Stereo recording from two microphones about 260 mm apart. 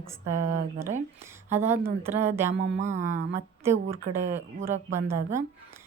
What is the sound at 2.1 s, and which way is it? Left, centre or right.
Speech, right.